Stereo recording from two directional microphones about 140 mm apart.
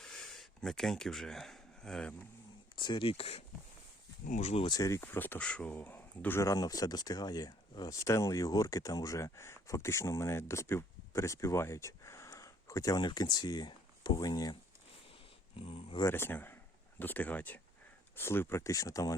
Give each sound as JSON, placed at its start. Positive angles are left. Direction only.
{"t": 0.0, "sound": "a sound", "side_deg": 5}
{"t": 2.7, "sound": "speech", "side_deg": 35}
{"t": 4.3, "sound": "speech", "side_deg": 55}
{"t": 4.6, "sound": "speech", "side_deg": 30}
{"t": 4.9, "sound": "speech", "side_deg": 15}
{"t": 15.5, "sound": "speech", "side_deg": 40}
{"t": 16.0, "sound": "speech", "side_deg": 15}